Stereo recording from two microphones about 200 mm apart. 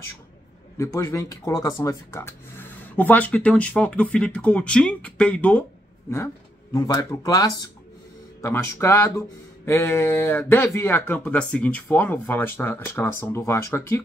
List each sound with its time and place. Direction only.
0.7 s speech: 15° left (ahead or behind)